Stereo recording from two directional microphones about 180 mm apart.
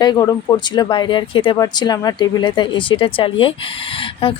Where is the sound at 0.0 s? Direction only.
20° left (ahead or behind).